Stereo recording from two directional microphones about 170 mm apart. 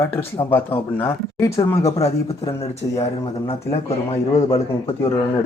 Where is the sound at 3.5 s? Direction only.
35° left (ahead or behind).